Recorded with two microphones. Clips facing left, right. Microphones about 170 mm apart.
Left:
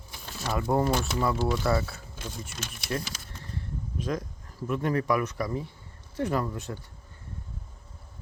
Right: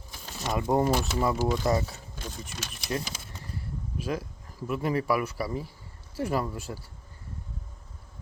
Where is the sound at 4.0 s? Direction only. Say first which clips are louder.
Left 1 dB; 5° right (ahead or behind).